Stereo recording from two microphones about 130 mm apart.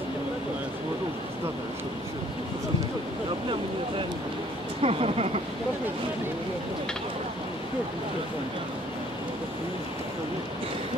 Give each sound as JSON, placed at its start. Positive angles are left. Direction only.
{"t": 4.8, "sound": "speech", "side_deg": -50}